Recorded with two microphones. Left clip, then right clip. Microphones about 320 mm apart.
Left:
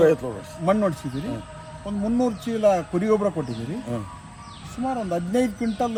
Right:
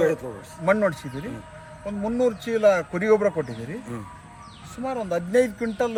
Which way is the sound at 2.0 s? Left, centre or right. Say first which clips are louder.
Right 2 dB; centre.